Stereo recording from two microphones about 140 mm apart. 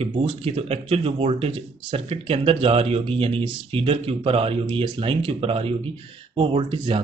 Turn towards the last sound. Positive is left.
turn(degrees=-35)  # may be behind; listen again after turning